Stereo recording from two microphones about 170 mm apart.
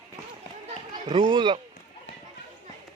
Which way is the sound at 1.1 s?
30° right (ahead or behind).